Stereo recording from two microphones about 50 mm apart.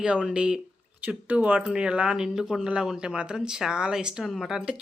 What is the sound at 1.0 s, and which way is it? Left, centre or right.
Speech, right.